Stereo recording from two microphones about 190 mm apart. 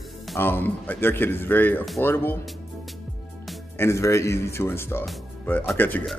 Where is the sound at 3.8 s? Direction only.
15° left (ahead or behind).